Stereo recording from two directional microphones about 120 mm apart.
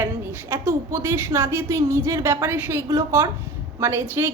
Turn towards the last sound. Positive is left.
turn(degrees=-20)  # may be behind; listen again after turning